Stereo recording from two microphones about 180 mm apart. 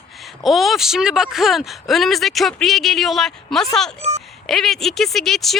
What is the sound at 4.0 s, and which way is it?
Speech, 35° right (ahead or behind).